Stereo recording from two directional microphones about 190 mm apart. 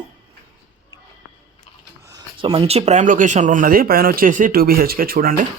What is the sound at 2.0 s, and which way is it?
Speech, 25° right (ahead or behind).